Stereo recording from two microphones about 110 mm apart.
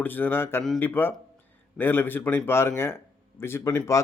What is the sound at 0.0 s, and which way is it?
Speech, 15° left (ahead or behind).